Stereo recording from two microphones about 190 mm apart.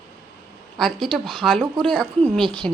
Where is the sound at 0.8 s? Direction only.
Centre (ahead or behind).